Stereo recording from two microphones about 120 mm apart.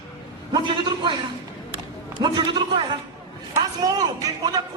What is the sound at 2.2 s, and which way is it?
Speech, 40° right (ahead or behind).